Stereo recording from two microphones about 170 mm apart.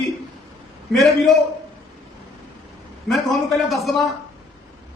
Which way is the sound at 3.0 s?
Centre (ahead or behind).